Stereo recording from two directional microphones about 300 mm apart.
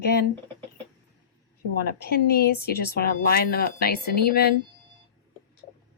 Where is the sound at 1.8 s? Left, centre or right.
Left.